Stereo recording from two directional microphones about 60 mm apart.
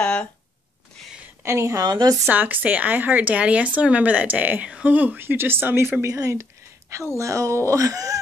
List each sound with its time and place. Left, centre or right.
0.0 s a sound: left
1.4 s a woman's voice: right
2.2 s speech: right
4.6 s speech: centre
4.9 s speech: right
6.0 s speech: right